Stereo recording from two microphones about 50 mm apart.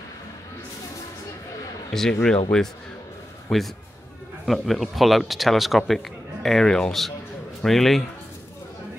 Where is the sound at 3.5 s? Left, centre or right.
Centre.